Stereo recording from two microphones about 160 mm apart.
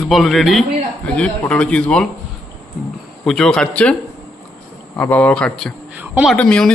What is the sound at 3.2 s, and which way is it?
Speech, 5° left (ahead or behind).